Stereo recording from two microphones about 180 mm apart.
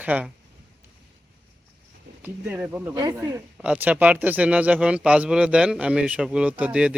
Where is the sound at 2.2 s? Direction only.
10° right (ahead or behind).